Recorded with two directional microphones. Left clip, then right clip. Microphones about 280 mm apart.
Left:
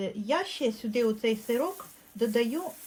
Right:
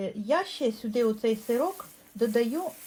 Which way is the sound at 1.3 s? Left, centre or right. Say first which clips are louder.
Right 2 dB; centre.